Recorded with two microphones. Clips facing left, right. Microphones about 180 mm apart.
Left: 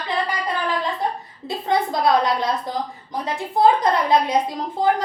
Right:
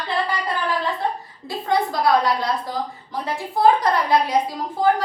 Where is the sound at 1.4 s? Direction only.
20° left (ahead or behind).